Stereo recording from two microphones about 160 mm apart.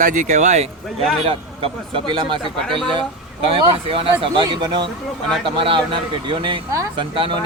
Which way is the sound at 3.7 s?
35° right (ahead or behind).